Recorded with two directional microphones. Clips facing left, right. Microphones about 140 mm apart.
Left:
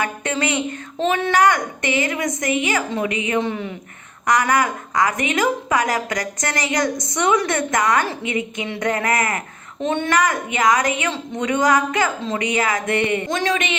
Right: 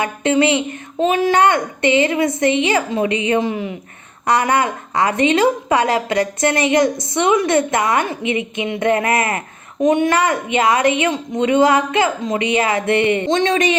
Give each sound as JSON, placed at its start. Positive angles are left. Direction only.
{"t": 0.0, "sound": "a woman's voice", "side_deg": -25}
{"t": 3.4, "sound": "a woman's voice", "side_deg": -15}
{"t": 4.3, "sound": "a woman's voice", "side_deg": -30}